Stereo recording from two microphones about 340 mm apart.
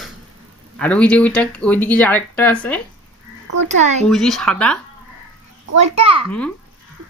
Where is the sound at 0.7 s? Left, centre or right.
Centre.